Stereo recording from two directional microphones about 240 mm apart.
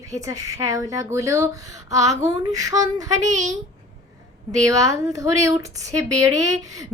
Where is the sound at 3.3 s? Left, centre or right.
Right.